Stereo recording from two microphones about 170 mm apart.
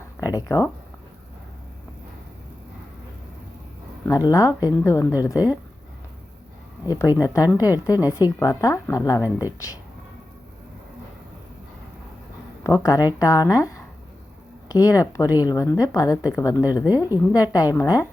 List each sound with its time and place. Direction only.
0.2 s speech: 20° left (ahead or behind)
4.0 s a woman's voice: 20° left (ahead or behind)
6.8 s a woman's voice: 20° left (ahead or behind)
12.6 s a woman's voice: 20° left (ahead or behind)